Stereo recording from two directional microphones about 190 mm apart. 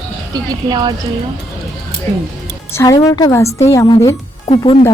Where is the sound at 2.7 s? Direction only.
15° left (ahead or behind).